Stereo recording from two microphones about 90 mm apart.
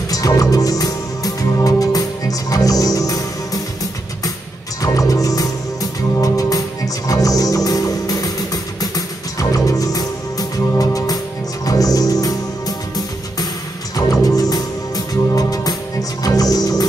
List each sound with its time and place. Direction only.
0.1 s music: 40° left (ahead or behind)
4.8 s music: 40° left (ahead or behind)